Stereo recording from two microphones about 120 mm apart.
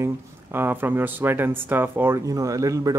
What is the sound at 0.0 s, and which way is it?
Speech, 20° right (ahead or behind).